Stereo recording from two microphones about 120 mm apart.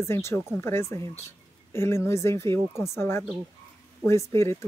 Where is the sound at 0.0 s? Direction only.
20° left (ahead or behind).